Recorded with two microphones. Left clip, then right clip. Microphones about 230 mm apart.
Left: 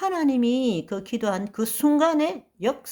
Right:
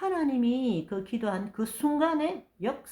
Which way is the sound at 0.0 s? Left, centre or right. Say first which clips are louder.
Left 5 dB; left.